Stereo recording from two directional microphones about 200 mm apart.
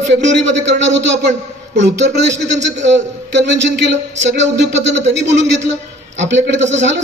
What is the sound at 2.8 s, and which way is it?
A man's voice, 65° right (ahead or behind).